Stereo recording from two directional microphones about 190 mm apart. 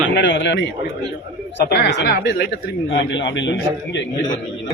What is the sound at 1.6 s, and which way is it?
Speech, 60° left (ahead or behind).